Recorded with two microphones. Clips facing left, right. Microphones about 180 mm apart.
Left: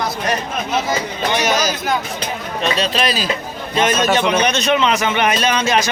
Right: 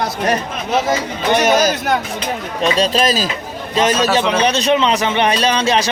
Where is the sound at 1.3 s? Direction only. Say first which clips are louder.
Right 6 dB; 55° right (ahead or behind).